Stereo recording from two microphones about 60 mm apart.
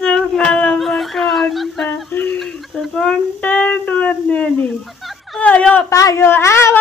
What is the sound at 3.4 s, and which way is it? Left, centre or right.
Music, left.